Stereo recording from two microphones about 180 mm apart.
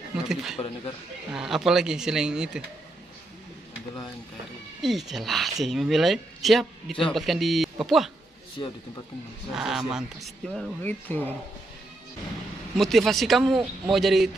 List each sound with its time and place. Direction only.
0.1 s a sound: 5° right (ahead or behind)
1.3 s speech: 5° right (ahead or behind)
4.8 s speech: centre (ahead or behind)
8.6 s speech: 25° left (ahead or behind)
9.5 s speech: 5° right (ahead or behind)
12.7 s speech: centre (ahead or behind)